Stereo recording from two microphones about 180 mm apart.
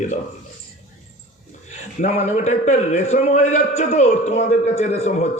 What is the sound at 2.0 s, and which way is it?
A man's voice, 35° left (ahead or behind).